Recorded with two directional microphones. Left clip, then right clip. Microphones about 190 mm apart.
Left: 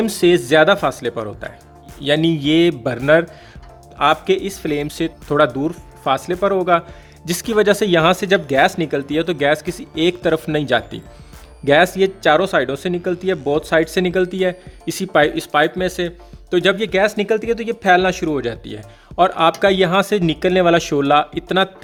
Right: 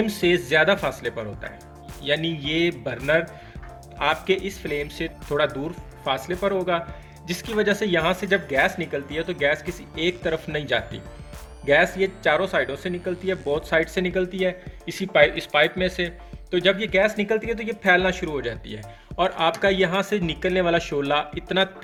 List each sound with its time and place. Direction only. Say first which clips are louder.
0.0 s speech: left 7 dB; 45° left (ahead or behind)